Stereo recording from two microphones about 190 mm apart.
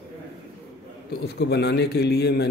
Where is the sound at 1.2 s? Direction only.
60° left (ahead or behind).